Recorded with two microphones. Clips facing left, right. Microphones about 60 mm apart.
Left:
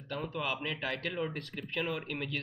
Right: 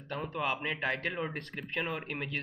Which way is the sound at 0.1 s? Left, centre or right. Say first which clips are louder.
Right 2 dB; right.